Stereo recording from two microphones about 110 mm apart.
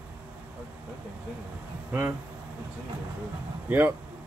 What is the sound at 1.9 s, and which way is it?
Speech, 20° right (ahead or behind).